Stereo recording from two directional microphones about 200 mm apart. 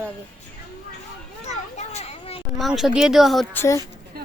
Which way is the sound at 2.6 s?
Centre (ahead or behind).